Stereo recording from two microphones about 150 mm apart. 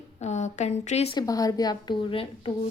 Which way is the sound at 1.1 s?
25° left (ahead or behind).